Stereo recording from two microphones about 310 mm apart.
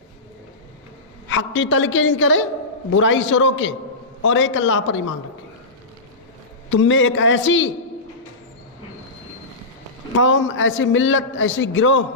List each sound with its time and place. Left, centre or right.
1.3 s a man's voice: left
6.7 s a man's voice: left
10.2 s a man's voice: left